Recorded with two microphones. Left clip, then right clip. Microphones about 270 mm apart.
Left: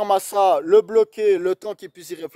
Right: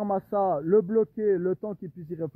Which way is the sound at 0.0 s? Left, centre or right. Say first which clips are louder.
Left 9 dB; centre.